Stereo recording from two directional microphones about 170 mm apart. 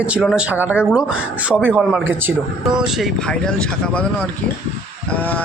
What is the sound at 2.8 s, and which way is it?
Speech, centre (ahead or behind).